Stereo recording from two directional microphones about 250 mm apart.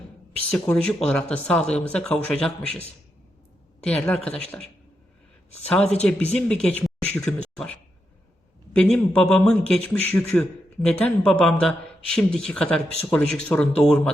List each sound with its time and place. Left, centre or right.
0.5 s speech: centre
5.6 s speech: centre